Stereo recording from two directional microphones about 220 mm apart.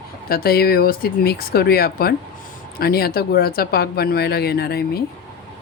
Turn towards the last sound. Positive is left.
turn(degrees=45)  # may be behind; listen again after turning